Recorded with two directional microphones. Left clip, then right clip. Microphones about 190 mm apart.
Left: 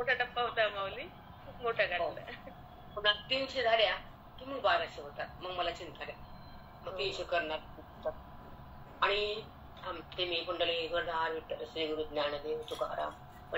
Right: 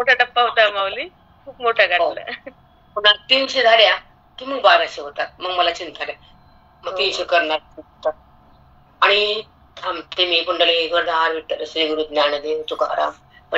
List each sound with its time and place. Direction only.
0.0 s a woman's voice: 50° right (ahead or behind)